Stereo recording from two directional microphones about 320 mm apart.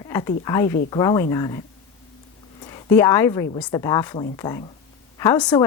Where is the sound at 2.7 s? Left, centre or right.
Centre.